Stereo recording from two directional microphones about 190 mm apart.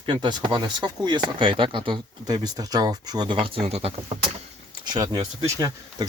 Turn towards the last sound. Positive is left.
turn(degrees=-20)  # may be behind; listen again after turning